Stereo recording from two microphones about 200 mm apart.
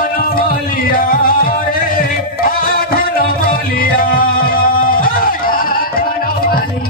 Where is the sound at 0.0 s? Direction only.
45° left (ahead or behind).